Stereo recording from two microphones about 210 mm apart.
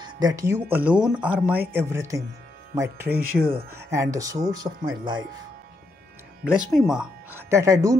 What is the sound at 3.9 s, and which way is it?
Speech, 15° right (ahead or behind).